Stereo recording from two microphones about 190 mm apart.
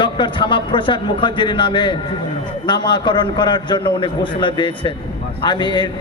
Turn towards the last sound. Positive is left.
turn(degrees=25)  # may be behind; listen again after turning